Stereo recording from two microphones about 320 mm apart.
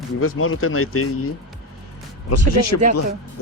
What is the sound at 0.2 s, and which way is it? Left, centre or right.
Speech, left.